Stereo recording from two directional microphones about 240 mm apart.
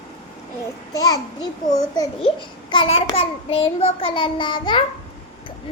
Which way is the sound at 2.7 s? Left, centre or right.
Left.